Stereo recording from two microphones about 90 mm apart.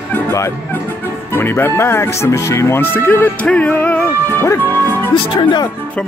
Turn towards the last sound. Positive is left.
turn(degrees=60)  # may be behind; listen again after turning